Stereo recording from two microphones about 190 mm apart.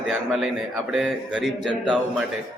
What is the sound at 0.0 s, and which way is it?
A man's voice, 5° right (ahead or behind).